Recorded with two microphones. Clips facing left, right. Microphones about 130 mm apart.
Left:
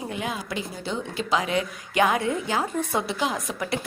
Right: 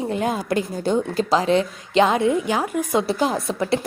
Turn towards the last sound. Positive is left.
turn(degrees=-30)  # may be behind; listen again after turning